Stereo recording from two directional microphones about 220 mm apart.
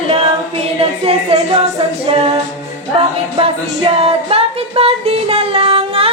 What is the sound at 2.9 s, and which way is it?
Music, 25° right (ahead or behind).